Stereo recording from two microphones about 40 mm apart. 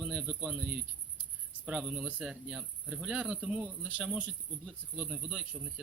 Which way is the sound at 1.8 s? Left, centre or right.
Right.